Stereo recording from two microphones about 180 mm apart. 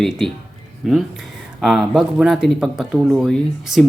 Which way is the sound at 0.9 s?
Centre (ahead or behind).